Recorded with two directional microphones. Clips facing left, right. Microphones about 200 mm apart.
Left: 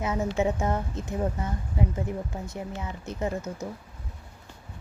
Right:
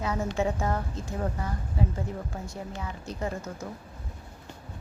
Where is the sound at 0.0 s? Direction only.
20° left (ahead or behind).